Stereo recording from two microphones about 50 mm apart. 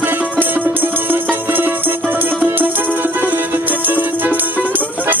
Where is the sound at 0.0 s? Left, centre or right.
Right.